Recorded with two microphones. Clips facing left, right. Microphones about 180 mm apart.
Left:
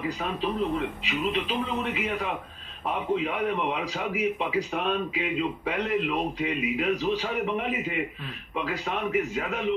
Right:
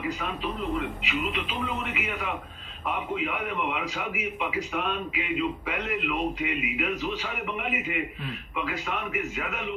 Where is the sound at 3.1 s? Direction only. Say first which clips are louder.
Left 3 dB; 35° left (ahead or behind).